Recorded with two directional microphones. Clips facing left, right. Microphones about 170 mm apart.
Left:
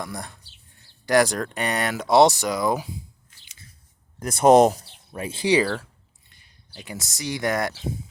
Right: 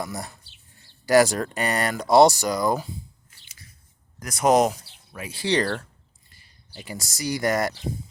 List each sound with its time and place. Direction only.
0.0 s speech: 5° right (ahead or behind)
4.2 s speech: 30° left (ahead or behind)
5.5 s speech: 5° left (ahead or behind)